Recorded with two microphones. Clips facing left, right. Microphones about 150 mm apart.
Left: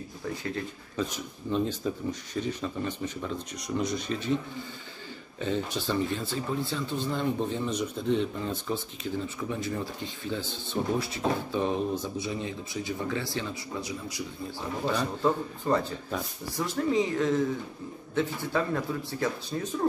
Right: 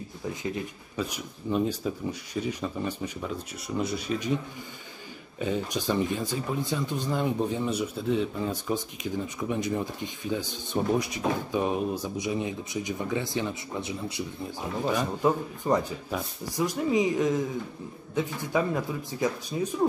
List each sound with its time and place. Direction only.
0.4 s speech: 15° right (ahead or behind)
5.4 s speech: 10° right (ahead or behind)